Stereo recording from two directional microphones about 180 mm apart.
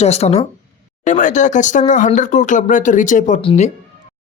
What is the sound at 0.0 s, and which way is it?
Speech, 35° left (ahead or behind).